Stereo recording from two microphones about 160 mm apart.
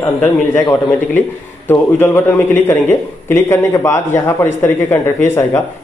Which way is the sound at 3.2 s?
15° left (ahead or behind).